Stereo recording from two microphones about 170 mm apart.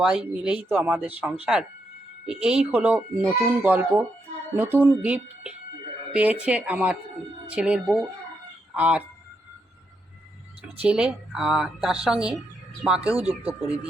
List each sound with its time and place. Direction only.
0.0 s a child's voice: 5° right (ahead or behind)
10.6 s a woman's voice: 5° right (ahead or behind)
13.1 s speech: 35° right (ahead or behind)